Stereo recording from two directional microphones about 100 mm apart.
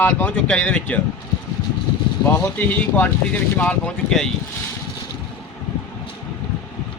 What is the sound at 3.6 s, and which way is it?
Speech, 15° left (ahead or behind).